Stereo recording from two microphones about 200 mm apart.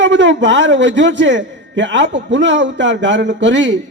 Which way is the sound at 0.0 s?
65° right (ahead or behind).